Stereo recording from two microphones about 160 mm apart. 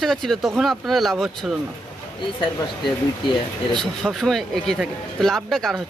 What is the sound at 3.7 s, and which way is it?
Speech, centre (ahead or behind).